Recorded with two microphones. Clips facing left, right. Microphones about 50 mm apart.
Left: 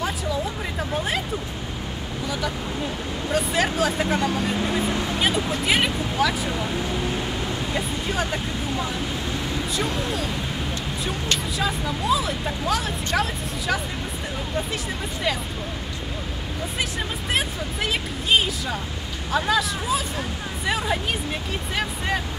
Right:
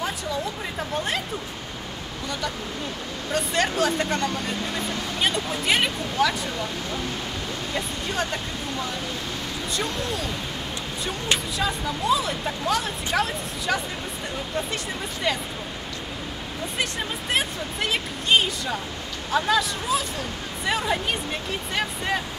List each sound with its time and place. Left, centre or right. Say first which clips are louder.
0.0 s music: left 2 dB; centre
3.3 s speech: left 1 dB; centre
4.6 s speech: left 5 dB; centre
5.2 s speech: even; centre
7.7 s speech: even; centre
11.5 s speech: left 1 dB; centre
15.3 s speech: even; centre
17.3 s speech: even; centre